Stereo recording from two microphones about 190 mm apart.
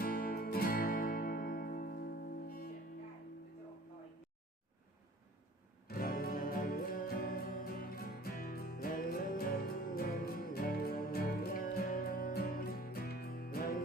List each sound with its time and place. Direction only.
0.0 s music: 50° left (ahead or behind)
5.9 s music: 50° left (ahead or behind)